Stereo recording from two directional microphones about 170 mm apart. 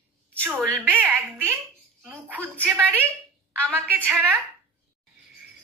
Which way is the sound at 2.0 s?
10° right (ahead or behind).